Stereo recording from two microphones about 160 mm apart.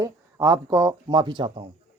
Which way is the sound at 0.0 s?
20° right (ahead or behind).